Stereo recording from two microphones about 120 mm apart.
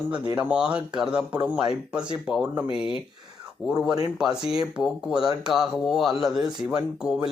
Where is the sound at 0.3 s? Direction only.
10° right (ahead or behind).